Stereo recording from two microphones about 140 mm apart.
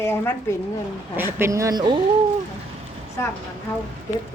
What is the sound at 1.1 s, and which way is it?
Speech, 15° right (ahead or behind).